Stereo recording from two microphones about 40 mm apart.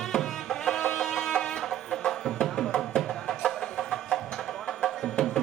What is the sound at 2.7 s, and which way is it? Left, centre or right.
Music, centre.